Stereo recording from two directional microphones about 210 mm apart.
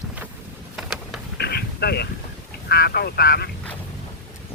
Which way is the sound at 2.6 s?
50° left (ahead or behind).